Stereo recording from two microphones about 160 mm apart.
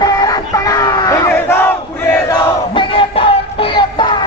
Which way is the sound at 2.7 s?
35° left (ahead or behind).